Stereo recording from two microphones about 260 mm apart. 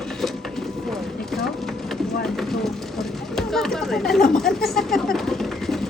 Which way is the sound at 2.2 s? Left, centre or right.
Centre.